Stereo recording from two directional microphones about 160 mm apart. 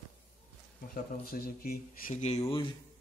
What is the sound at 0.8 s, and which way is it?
Speech, 65° left (ahead or behind).